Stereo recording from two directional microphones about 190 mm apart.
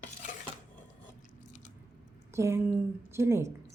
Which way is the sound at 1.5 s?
40° left (ahead or behind).